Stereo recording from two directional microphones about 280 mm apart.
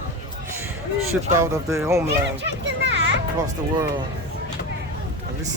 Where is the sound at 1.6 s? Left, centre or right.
Centre.